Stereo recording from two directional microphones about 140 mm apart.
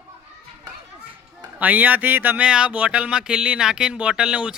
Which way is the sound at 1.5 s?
10° right (ahead or behind).